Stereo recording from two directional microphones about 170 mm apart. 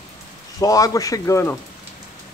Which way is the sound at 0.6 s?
20° left (ahead or behind).